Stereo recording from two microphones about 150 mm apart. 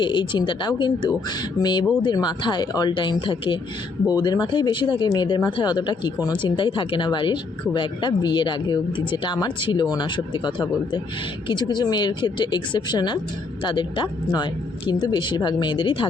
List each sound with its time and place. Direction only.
0.0 s speech: 30° left (ahead or behind)